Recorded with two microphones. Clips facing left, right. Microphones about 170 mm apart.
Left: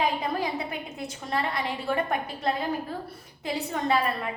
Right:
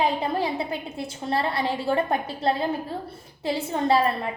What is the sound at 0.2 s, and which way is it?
A woman's voice, 30° right (ahead or behind).